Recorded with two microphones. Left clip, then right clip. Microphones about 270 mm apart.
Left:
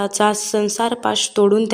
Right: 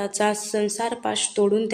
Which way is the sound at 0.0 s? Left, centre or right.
Left.